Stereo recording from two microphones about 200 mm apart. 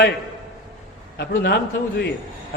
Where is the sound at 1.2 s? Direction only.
55° left (ahead or behind).